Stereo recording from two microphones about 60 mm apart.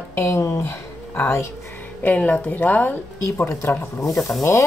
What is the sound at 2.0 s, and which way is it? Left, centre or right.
Speech, left.